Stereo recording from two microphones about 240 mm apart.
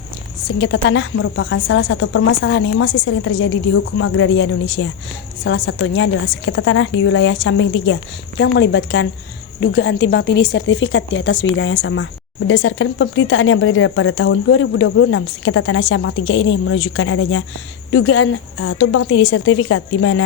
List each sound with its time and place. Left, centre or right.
0.6 s speech: left